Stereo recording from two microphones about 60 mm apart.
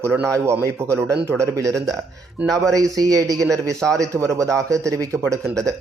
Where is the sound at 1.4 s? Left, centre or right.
Right.